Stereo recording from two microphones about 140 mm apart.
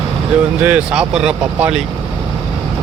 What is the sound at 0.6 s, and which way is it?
Speech, 10° right (ahead or behind).